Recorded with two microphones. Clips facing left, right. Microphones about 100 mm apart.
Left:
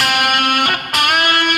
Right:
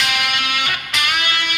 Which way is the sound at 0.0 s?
50° left (ahead or behind).